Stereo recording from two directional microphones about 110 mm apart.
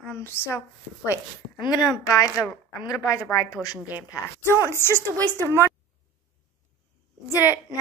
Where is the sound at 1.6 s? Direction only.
40° left (ahead or behind); by 5.0 s 25° left (ahead or behind).